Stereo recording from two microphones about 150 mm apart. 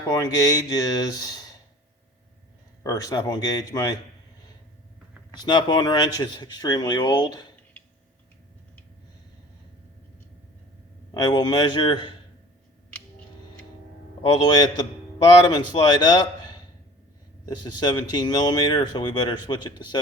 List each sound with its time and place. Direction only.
0.1 s speech: 25° left (ahead or behind)
2.8 s speech: 25° left (ahead or behind)
5.4 s speech: 30° left (ahead or behind)
11.1 s speech: 30° left (ahead or behind)
14.2 s a man's voice: 30° left (ahead or behind)